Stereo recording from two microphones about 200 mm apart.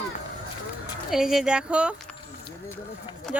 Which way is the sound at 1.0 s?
Centre (ahead or behind).